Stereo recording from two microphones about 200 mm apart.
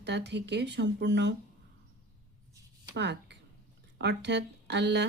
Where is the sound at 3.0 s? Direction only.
60° right (ahead or behind).